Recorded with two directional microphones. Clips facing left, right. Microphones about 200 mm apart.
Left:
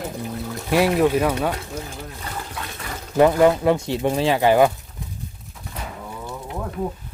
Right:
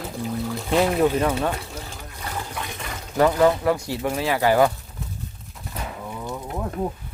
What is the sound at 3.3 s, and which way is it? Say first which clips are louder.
Speech: left 3 dB; 15° left (ahead or behind).